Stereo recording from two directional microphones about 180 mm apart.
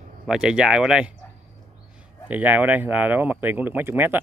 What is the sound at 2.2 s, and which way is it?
Speech, 10° right (ahead or behind).